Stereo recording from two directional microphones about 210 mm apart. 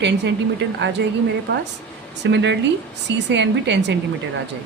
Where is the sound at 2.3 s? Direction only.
55° right (ahead or behind).